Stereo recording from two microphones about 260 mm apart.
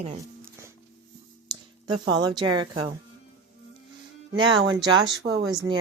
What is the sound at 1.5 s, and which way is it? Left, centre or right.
Speech, centre.